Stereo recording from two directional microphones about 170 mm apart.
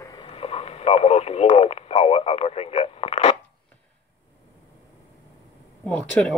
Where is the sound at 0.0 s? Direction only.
25° left (ahead or behind).